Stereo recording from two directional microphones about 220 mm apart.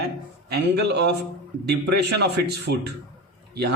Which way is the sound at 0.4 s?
45° right (ahead or behind).